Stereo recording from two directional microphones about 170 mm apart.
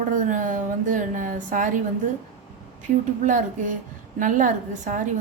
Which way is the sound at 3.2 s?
50° right (ahead or behind).